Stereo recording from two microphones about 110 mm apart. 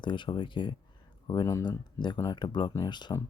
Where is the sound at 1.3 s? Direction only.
35° left (ahead or behind).